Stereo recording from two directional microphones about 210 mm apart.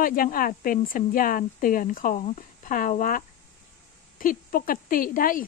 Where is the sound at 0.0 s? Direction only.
40° left (ahead or behind).